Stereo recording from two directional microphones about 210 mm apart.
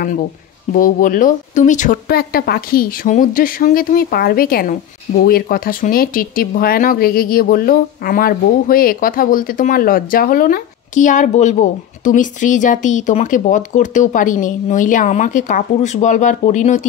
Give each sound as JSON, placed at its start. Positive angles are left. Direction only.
{"t": 0.7, "sound": "speech", "side_deg": 40}